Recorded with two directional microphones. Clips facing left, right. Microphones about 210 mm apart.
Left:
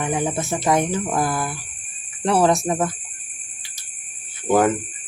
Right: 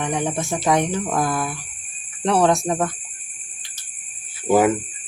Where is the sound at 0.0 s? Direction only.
5° left (ahead or behind).